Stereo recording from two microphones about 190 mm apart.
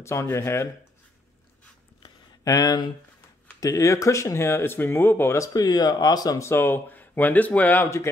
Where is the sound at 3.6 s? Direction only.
15° left (ahead or behind).